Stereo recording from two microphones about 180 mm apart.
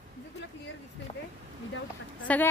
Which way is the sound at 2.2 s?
10° left (ahead or behind).